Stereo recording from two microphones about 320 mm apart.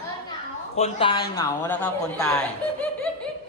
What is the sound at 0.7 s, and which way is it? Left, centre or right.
A man's voice, centre.